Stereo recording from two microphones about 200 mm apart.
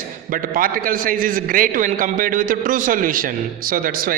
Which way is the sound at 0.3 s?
45° right (ahead or behind).